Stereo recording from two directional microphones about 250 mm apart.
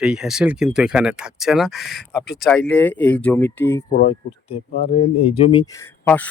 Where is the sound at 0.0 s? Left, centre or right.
Centre.